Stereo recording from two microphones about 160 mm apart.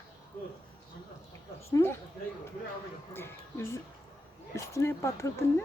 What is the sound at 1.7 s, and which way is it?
Speech, 15° left (ahead or behind).